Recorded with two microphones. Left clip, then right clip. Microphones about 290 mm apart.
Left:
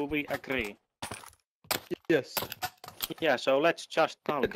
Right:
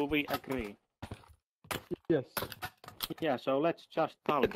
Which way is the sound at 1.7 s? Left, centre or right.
Centre.